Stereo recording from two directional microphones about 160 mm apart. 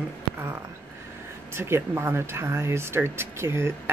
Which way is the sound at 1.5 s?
15° right (ahead or behind).